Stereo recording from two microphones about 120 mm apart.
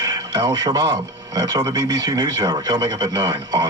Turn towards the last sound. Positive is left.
turn(degrees=-35)  # may be behind; listen again after turning